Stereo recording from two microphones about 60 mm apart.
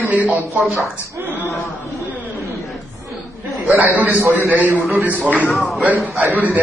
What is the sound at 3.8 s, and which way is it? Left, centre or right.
A man's voice, right.